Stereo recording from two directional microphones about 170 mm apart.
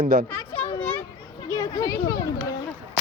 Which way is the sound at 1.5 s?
20° left (ahead or behind).